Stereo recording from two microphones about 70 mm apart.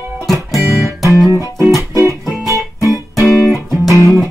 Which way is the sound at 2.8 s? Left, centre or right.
Left.